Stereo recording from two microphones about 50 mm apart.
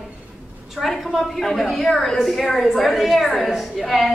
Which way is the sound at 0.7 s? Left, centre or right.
Centre.